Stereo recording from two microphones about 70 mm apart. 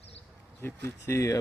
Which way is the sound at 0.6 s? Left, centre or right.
Left.